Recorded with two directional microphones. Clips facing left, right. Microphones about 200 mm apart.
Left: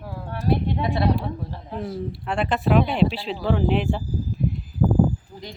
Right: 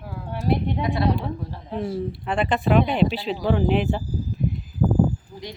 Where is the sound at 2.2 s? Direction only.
Centre (ahead or behind).